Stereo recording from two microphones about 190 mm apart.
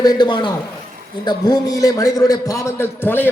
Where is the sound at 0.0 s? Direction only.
20° left (ahead or behind).